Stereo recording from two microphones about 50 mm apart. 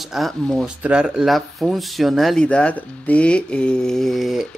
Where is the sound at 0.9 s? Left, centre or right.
Right.